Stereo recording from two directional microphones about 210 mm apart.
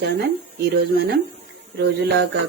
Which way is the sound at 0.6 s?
50° right (ahead or behind).